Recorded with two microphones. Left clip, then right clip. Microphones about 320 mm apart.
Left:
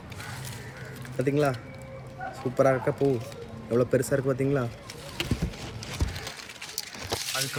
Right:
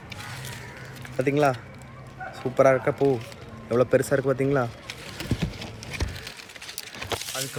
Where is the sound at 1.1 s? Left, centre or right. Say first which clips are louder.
Right 4 dB; centre.